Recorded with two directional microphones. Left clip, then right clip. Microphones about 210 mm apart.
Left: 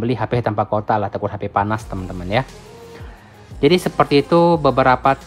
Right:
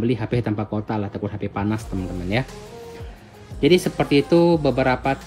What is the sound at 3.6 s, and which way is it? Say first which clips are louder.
Speech: left 3 dB; 15° left (ahead or behind).